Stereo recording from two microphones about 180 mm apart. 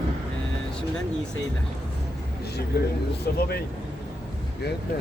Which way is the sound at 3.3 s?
65° left (ahead or behind).